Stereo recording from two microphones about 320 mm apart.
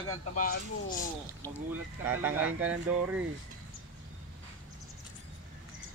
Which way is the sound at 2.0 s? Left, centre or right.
Centre.